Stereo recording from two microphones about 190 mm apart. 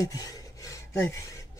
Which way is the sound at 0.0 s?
20° left (ahead or behind).